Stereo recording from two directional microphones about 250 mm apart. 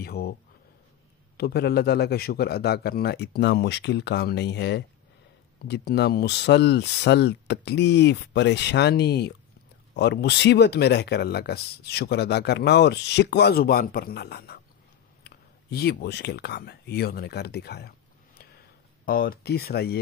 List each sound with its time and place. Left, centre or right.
0.0 s a sound: left
1.3 s speech: left
19.0 s speech: left